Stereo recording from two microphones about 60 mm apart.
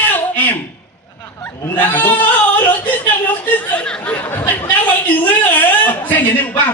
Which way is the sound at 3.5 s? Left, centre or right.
Left.